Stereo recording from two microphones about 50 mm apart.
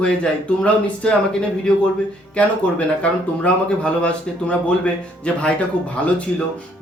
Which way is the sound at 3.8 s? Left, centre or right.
Left.